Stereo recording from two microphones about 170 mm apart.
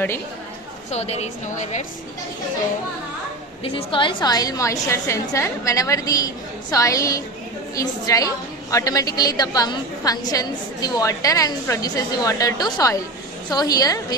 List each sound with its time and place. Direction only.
0.9 s a woman's voice: 40° left (ahead or behind)
3.6 s a woman's voice: 30° left (ahead or behind)